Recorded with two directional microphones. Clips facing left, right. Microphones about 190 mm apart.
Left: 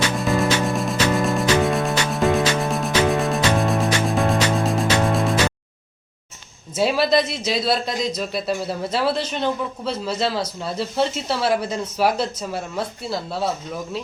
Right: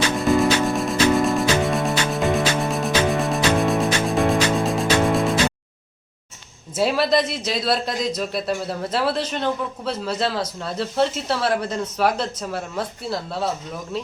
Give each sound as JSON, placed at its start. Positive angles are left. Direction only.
{"t": 0.2, "sound": "music", "side_deg": 0}
{"t": 6.7, "sound": "a man's voice", "side_deg": 0}